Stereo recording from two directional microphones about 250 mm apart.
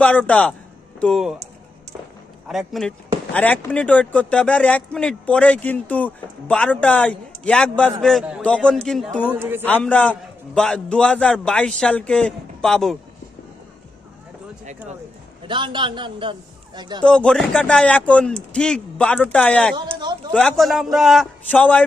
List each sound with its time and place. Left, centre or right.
0.0 s speech: centre
2.4 s a man's voice: centre
9.7 s speech: centre
15.4 s a man's voice: centre
17.0 s speech: centre
19.9 s a sound: centre
20.3 s speech: centre